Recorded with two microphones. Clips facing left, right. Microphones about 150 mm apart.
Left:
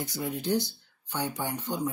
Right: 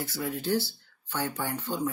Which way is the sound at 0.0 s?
20° left (ahead or behind).